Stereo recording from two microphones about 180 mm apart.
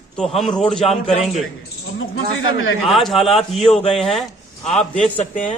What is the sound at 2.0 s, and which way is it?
Speech, 90° left.